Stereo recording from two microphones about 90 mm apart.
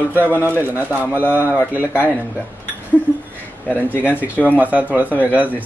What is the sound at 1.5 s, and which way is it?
Speech, 20° left (ahead or behind).